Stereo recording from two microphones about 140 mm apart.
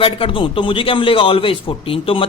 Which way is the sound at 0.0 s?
40° left (ahead or behind).